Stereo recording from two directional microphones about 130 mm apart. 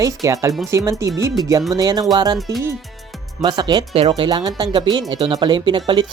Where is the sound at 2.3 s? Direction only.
Centre (ahead or behind).